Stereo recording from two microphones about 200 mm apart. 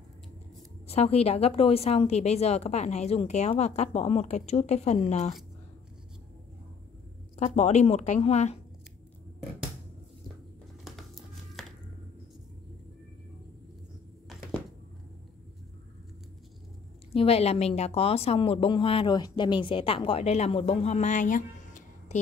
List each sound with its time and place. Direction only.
0.8 s a woman's voice: 30° left (ahead or behind)
7.3 s a woman's voice: 35° left (ahead or behind)
10.8 s music: centre (ahead or behind)
14.3 s a sound: centre (ahead or behind)
17.1 s a woman's voice: 30° left (ahead or behind)